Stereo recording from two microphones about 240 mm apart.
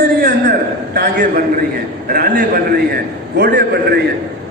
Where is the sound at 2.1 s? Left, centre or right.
Right.